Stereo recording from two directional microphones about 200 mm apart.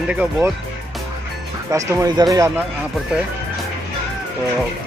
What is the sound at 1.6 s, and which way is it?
Speech, 15° right (ahead or behind).